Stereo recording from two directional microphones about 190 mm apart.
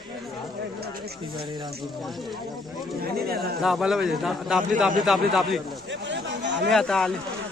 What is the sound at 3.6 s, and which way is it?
A man's voice, centre (ahead or behind).